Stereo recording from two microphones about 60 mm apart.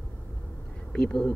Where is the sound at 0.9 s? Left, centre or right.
Centre.